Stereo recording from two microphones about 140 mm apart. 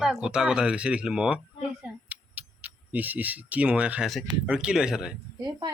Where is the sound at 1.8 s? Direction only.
10° right (ahead or behind).